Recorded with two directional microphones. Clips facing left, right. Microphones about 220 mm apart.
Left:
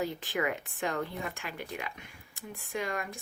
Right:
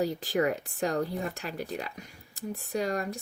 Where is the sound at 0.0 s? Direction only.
40° right (ahead or behind).